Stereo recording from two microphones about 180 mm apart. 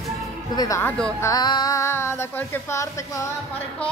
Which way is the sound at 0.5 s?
20° left (ahead or behind).